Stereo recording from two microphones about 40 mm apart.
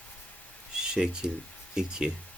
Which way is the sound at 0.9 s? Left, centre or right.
Right.